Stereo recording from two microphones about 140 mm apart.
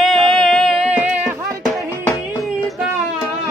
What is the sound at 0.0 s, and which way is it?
Music, centre (ahead or behind).